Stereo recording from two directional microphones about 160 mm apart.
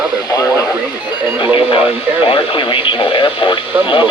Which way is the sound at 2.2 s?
35° left (ahead or behind).